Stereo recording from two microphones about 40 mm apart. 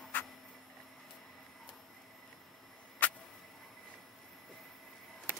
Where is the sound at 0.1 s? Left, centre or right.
Left.